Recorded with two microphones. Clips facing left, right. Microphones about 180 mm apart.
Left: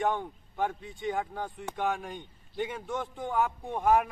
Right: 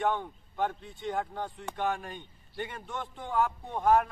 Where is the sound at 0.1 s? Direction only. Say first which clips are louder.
Even; 10° left (ahead or behind).